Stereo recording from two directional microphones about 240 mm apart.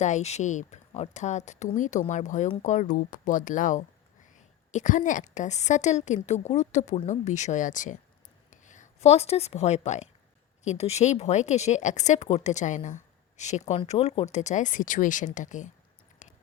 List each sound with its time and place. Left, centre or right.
0.0 s a woman's voice: left